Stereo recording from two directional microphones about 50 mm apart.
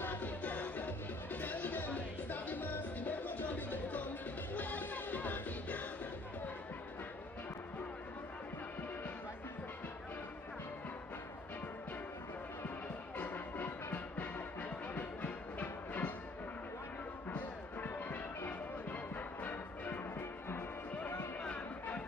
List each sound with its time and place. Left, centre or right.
0.0 s music: left
13.2 s music: left
17.3 s music: left
20.2 s music: left
21.4 s music: left